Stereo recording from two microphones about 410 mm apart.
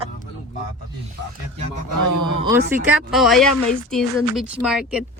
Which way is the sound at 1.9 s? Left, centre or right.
Right.